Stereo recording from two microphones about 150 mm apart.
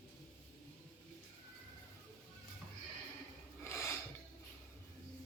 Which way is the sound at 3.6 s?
20° left (ahead or behind).